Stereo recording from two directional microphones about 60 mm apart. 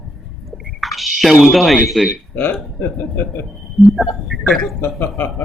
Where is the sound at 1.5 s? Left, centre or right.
Centre.